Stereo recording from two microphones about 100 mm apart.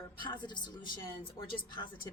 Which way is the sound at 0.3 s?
50° left (ahead or behind).